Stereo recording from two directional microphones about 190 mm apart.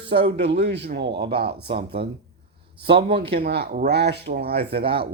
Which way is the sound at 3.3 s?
60° right (ahead or behind).